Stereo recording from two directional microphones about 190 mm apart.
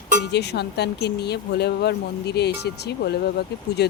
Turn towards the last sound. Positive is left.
turn(degrees=60)  # may be behind; listen again after turning